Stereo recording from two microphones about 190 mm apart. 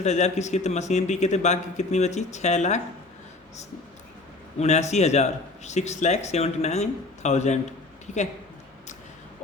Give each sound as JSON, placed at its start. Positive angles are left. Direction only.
{"t": 0.0, "sound": "a man's voice", "side_deg": 35}
{"t": 4.6, "sound": "a man's voice", "side_deg": 35}